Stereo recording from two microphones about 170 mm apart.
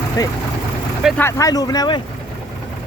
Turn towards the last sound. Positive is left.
turn(degrees=25)  # may be behind; listen again after turning